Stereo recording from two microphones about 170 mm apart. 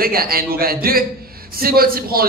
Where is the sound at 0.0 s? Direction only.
60° right (ahead or behind).